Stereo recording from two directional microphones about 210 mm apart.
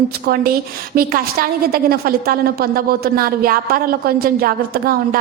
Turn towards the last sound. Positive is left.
turn(degrees=-45)  # may be behind; listen again after turning